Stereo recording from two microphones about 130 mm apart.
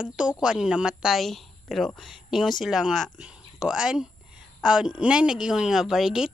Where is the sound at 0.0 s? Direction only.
5° right (ahead or behind).